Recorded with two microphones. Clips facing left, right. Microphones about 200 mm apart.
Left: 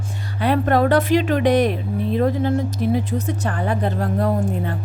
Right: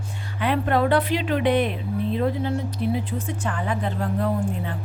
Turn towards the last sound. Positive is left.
turn(degrees=40)  # may be behind; listen again after turning